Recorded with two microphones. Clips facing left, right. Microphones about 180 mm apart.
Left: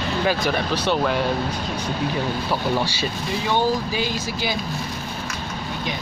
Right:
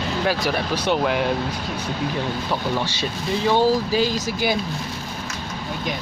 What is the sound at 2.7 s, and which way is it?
Speech, 10° left (ahead or behind).